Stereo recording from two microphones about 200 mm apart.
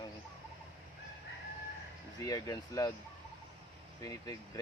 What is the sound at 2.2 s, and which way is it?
Speech, 20° left (ahead or behind).